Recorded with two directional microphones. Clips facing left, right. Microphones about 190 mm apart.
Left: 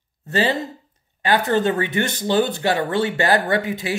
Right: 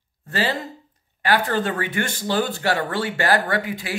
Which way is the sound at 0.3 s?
20° left (ahead or behind).